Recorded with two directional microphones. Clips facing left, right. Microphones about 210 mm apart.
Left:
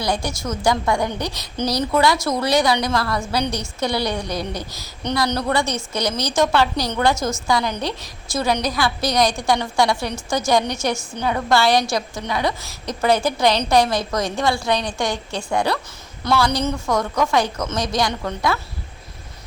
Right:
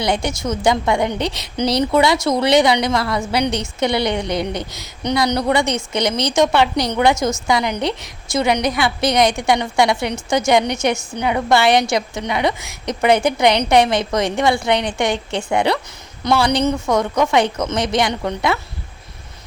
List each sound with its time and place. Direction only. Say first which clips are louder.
0.0 s a woman's voice: right 3 dB; 20° right (ahead or behind)